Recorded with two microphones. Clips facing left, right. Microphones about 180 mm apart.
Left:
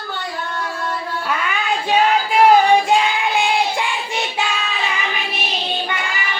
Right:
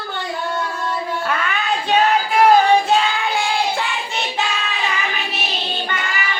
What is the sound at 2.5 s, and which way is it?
Child singing, 15° left (ahead or behind).